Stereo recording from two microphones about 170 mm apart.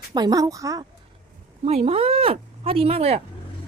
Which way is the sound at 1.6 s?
35° right (ahead or behind).